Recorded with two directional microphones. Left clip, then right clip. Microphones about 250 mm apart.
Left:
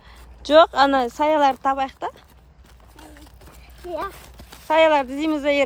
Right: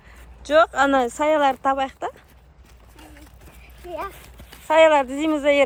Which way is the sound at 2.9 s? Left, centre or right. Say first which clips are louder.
Left 1 dB; left.